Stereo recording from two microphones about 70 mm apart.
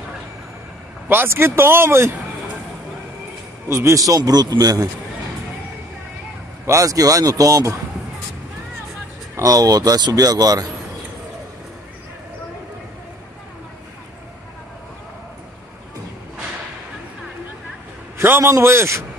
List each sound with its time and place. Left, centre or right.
1.0 s speech: right
3.6 s a man's voice: right
6.6 s speech: right
9.4 s a man's voice: right
18.1 s speech: right